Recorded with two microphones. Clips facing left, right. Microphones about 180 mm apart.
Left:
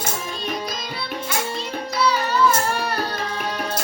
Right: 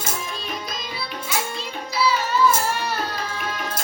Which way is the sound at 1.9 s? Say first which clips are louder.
Left 1 dB; centre (ahead or behind).